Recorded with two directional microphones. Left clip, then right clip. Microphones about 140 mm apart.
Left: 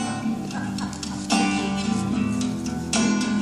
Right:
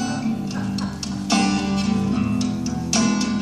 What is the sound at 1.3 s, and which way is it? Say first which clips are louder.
Music: right 2 dB; 10° left (ahead or behind).